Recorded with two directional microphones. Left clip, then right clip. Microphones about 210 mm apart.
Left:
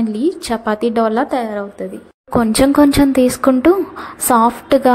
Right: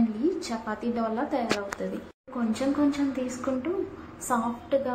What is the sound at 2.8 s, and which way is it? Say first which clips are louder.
A woman's voice: left 16 dB; 50° left (ahead or behind).